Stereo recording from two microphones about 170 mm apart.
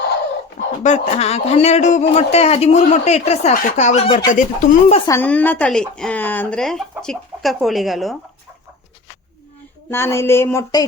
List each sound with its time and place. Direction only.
0.8 s a man's voice: 45° left (ahead or behind)
4.3 s speech: 50° left (ahead or behind)
5.0 s speech: 10° left (ahead or behind)
9.9 s a sound: 15° left (ahead or behind)